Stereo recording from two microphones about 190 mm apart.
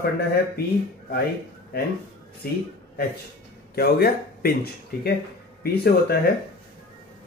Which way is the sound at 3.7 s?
55° left (ahead or behind).